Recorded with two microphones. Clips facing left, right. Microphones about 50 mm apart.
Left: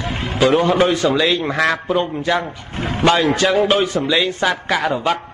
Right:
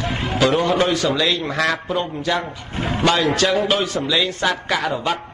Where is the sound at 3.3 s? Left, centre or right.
Centre.